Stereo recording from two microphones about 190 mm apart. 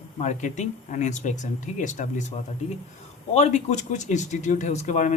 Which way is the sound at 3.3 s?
35° left (ahead or behind).